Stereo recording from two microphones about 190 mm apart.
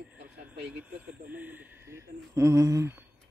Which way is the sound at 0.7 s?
5° right (ahead or behind).